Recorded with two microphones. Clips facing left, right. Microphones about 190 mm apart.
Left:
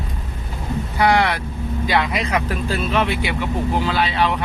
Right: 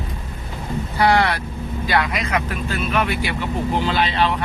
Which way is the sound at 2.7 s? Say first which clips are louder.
Left 1 dB; 25° left (ahead or behind).